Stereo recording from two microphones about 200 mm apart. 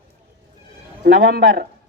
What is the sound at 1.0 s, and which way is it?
Speech, 55° right (ahead or behind).